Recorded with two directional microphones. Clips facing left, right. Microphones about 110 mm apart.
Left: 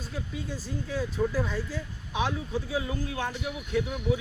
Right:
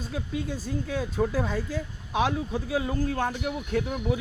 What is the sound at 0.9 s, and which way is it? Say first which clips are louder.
Speech: right 1 dB; 50° right (ahead or behind).